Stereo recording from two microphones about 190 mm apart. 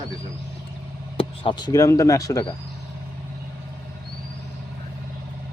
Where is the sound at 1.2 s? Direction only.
25° left (ahead or behind).